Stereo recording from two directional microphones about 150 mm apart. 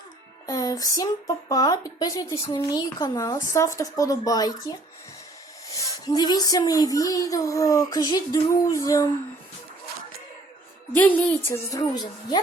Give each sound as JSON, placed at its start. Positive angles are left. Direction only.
{"t": 0.4, "sound": "speech", "side_deg": 25}
{"t": 10.9, "sound": "a woman's voice", "side_deg": 10}